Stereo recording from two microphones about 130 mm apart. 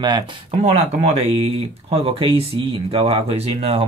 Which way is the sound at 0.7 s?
50° right (ahead or behind).